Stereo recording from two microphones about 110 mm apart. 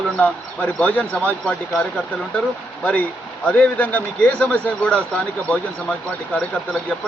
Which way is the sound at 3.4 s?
10° left (ahead or behind).